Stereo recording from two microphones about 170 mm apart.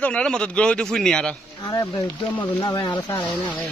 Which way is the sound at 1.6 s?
20° left (ahead or behind).